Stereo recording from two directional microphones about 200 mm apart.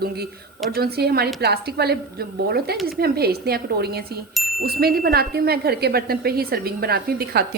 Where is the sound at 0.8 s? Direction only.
50° right (ahead or behind).